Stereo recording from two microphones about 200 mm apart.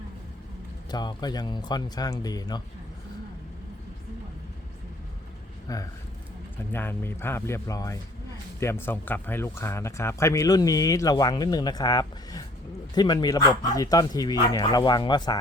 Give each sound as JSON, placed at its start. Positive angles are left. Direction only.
{"t": 0.9, "sound": "speech", "side_deg": 20}
{"t": 5.6, "sound": "speech", "side_deg": 15}